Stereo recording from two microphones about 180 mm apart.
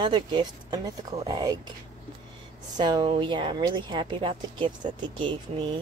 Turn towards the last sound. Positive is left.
turn(degrees=-25)  # may be behind; listen again after turning